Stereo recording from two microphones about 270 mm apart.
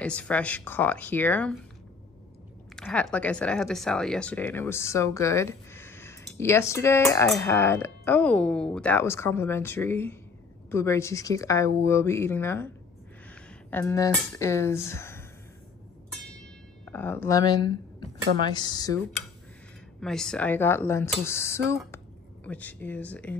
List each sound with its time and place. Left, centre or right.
0.0 s speech: centre
2.7 s speech: centre
16.8 s speech: centre
20.0 s a woman's voice: centre